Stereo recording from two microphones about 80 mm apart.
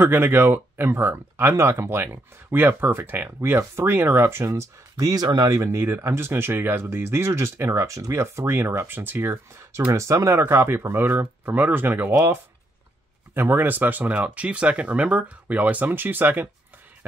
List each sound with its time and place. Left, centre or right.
0.0 s speech: right
4.9 s speech: right
5.6 s speech: right
9.9 s speech: right